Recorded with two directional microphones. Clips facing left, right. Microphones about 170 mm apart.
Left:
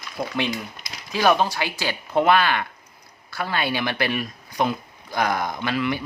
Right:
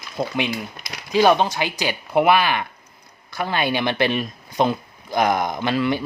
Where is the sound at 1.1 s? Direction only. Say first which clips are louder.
Right 3 dB; 20° right (ahead or behind).